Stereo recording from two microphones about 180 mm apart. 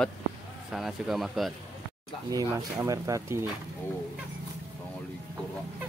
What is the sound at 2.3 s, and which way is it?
Speech, 20° right (ahead or behind).